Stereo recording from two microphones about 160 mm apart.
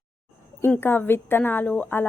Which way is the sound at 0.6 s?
15° left (ahead or behind).